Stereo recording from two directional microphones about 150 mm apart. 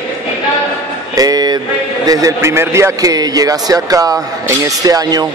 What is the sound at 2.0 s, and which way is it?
A man's voice, 25° right (ahead or behind).